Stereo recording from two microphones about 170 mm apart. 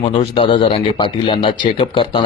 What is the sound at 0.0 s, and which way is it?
Speech, 30° left (ahead or behind).